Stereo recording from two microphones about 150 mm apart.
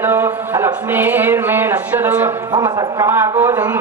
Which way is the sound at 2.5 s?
30° right (ahead or behind).